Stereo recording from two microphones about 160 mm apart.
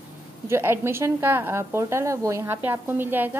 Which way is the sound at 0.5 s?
15° right (ahead or behind).